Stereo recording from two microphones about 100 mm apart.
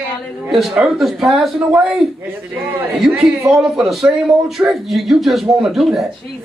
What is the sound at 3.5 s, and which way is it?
Speech, 5° right (ahead or behind).